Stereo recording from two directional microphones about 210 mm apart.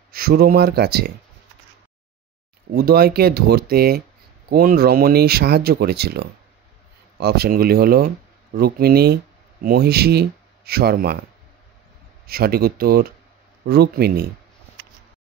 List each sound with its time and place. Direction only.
0.1 s speech: 45° right (ahead or behind)
2.7 s speech: 45° right (ahead or behind)
12.3 s speech: 45° right (ahead or behind)